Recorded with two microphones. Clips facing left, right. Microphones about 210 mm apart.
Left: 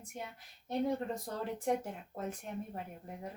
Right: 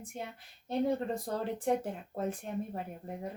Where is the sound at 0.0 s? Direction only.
30° right (ahead or behind).